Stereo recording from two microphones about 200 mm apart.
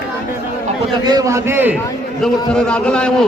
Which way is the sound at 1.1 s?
15° right (ahead or behind).